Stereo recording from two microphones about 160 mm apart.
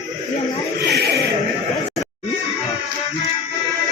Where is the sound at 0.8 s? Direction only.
90° right.